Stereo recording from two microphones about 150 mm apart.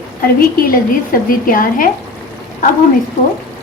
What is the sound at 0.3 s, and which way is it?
Speech, 70° left (ahead or behind).